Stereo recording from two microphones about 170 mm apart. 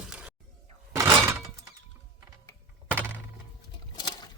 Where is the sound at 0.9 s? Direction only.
15° right (ahead or behind).